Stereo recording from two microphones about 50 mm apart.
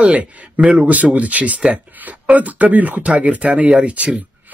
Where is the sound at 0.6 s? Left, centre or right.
Right.